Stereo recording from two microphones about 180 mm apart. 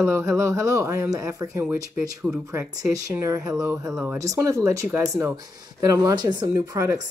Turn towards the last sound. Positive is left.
turn(degrees=-20)  # may be behind; listen again after turning